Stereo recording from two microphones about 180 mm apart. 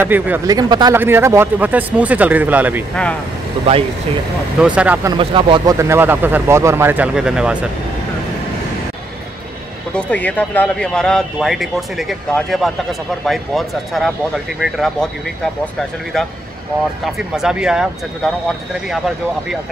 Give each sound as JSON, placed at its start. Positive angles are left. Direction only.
{"t": 0.0, "sound": "speech", "side_deg": -10}
{"t": 0.5, "sound": "speech", "side_deg": -20}
{"t": 0.9, "sound": "speech", "side_deg": -15}
{"t": 4.6, "sound": "speech", "side_deg": -5}
{"t": 5.0, "sound": "speech", "side_deg": -25}
{"t": 5.8, "sound": "speech", "side_deg": -15}
{"t": 9.9, "sound": "speech", "side_deg": 10}
{"t": 16.1, "sound": "speech", "side_deg": 5}